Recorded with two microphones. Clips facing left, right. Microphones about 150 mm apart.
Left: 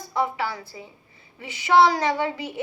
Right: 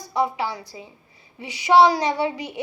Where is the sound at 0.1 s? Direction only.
15° right (ahead or behind).